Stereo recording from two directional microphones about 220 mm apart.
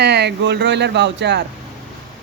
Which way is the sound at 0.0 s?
50° right (ahead or behind).